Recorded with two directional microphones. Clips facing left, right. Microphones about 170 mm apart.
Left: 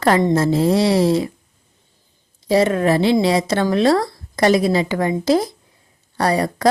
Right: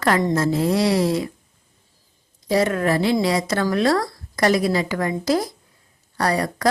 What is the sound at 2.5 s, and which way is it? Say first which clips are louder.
Speech: left 4 dB; 25° left (ahead or behind).